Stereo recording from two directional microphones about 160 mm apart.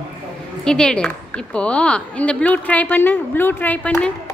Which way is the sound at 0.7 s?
5° left (ahead or behind).